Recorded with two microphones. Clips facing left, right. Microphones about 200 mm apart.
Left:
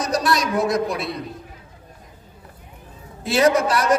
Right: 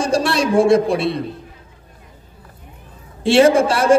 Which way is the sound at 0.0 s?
30° right (ahead or behind).